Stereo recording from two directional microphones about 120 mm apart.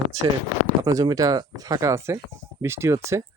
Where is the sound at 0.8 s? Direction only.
30° right (ahead or behind).